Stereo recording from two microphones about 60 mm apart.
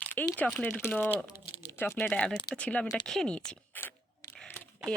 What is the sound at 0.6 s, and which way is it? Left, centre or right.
Speech, left.